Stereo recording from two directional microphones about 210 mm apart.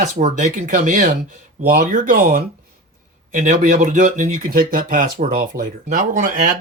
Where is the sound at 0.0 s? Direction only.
35° right (ahead or behind).